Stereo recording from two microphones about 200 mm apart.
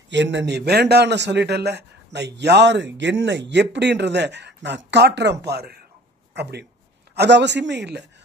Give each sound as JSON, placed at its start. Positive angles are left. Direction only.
{"t": 0.1, "sound": "speech", "side_deg": -60}
{"t": 7.2, "sound": "speech", "side_deg": -60}